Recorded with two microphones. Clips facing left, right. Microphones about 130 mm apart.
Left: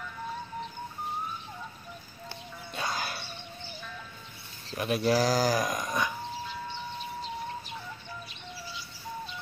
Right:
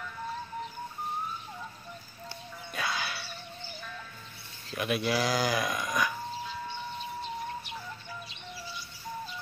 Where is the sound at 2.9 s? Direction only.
45° left (ahead or behind).